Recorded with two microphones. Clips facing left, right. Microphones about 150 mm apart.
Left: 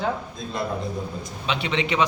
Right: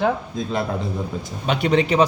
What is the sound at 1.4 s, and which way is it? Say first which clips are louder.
Speech: right 7 dB; 50° right (ahead or behind).